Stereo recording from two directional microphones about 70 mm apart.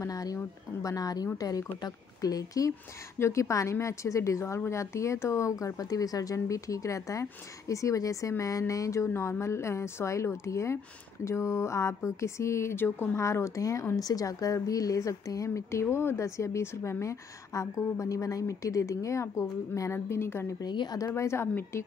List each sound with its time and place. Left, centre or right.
0.0 s a woman's voice: left
3.2 s speech: left
13.2 s a woman's voice: left
20.6 s a woman's voice: left
21.1 s a woman's voice: left